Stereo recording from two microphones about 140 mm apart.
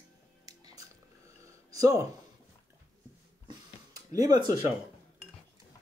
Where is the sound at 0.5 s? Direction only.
25° right (ahead or behind).